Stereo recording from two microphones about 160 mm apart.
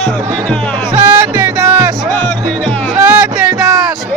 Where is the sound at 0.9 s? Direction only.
15° right (ahead or behind).